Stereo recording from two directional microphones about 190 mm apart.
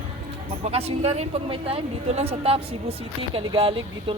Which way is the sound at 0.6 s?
30° right (ahead or behind).